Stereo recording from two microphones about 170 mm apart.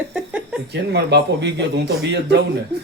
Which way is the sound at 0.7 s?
80° right.